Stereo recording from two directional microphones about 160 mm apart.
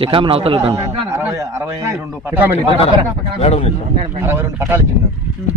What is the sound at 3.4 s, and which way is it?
Speech, 40° left (ahead or behind).